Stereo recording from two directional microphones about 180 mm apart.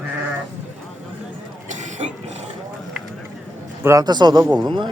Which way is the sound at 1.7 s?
40° right (ahead or behind).